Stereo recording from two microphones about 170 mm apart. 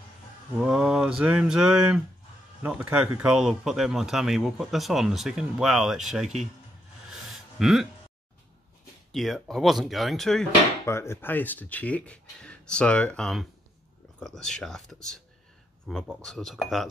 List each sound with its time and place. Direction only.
0.6 s speech: 5° right (ahead or behind)
7.1 s a sound: centre (ahead or behind)
9.1 s speech: centre (ahead or behind)
10.9 s speech: 15° left (ahead or behind)